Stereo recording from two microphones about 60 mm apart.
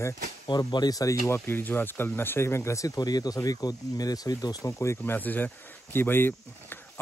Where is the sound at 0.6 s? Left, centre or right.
Left.